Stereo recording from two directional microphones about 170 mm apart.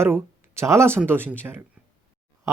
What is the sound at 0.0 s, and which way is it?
Speech, 15° right (ahead or behind).